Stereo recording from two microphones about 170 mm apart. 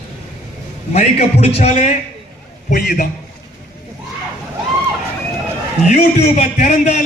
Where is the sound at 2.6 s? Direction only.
55° left (ahead or behind).